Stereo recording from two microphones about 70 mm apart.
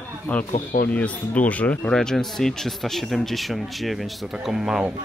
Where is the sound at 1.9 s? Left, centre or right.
Centre.